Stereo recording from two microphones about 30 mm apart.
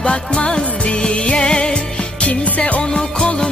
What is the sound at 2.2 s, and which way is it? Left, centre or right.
Music, left.